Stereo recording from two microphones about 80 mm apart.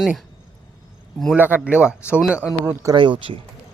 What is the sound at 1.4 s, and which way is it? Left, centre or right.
Speech, right.